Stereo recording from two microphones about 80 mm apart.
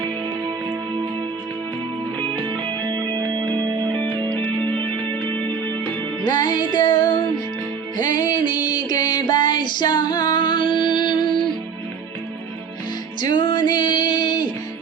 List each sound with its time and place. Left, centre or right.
2.1 s music: centre
5.2 s music: left
6.2 s music: left
13.3 s music: left